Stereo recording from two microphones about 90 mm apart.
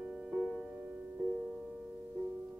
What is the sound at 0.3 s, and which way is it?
Music, 10° right (ahead or behind).